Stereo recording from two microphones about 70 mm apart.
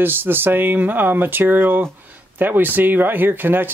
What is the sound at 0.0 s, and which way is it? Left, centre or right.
Speech, right.